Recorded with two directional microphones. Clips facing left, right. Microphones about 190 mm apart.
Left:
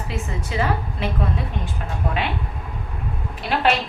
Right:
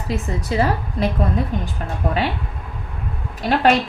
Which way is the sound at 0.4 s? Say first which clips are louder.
Right 3 dB; 35° right (ahead or behind).